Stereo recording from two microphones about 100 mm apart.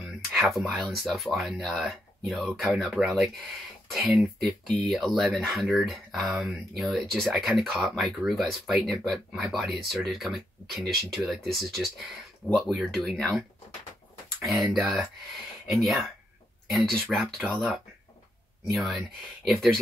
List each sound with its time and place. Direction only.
0.3 s speech: centre (ahead or behind)
14.4 s speech: centre (ahead or behind)
18.7 s speech: centre (ahead or behind)